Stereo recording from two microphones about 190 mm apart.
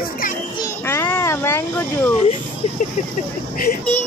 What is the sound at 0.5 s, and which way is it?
A child's voice, 10° left (ahead or behind).